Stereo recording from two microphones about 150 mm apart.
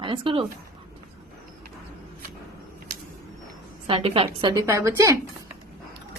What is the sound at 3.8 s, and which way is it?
Speech, 35° right (ahead or behind).